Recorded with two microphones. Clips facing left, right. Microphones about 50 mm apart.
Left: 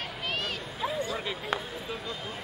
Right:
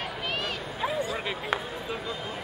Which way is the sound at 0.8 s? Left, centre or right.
Right.